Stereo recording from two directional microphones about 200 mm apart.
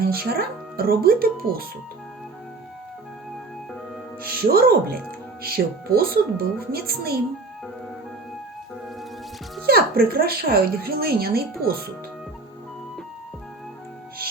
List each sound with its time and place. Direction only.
0.0 s speech: 50° right (ahead or behind)
4.2 s speech: 50° right (ahead or behind)
9.6 s speech: 50° right (ahead or behind)